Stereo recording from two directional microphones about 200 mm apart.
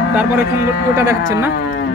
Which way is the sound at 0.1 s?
10° right (ahead or behind).